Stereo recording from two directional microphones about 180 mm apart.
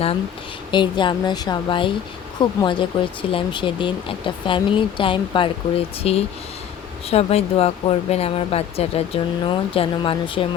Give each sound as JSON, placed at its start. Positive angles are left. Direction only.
{"t": 0.7, "sound": "speech", "side_deg": 25}